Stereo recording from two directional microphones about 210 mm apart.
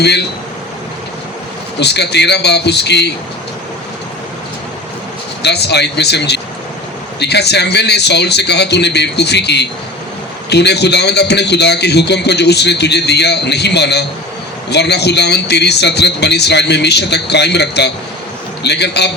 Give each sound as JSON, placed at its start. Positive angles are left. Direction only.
{"t": 1.8, "sound": "a man's voice", "side_deg": 50}
{"t": 5.4, "sound": "a man's voice", "side_deg": 55}